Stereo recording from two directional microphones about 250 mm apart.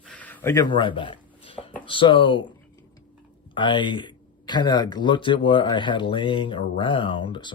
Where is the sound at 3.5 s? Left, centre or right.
Centre.